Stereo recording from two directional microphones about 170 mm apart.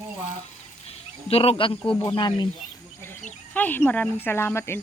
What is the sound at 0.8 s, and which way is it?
Speech, 35° left (ahead or behind).